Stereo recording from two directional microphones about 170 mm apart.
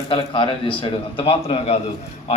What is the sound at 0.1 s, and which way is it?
A man's voice, 30° left (ahead or behind).